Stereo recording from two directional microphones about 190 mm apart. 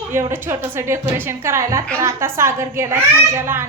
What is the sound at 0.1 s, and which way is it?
A woman's voice, 15° right (ahead or behind).